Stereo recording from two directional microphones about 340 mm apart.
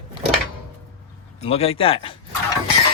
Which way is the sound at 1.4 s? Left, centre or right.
Centre.